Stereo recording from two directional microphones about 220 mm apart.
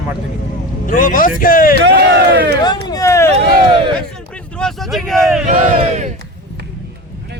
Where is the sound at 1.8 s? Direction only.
45° right (ahead or behind).